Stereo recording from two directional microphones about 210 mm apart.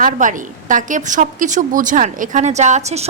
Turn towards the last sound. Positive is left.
turn(degrees=-30)  # may be behind; listen again after turning